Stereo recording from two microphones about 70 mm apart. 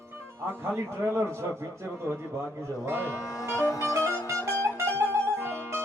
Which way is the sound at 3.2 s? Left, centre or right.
Left.